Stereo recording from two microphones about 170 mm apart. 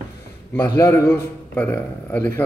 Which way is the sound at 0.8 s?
15° left (ahead or behind).